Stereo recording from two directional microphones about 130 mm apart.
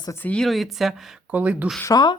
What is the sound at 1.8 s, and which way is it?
Speech, 30° left (ahead or behind).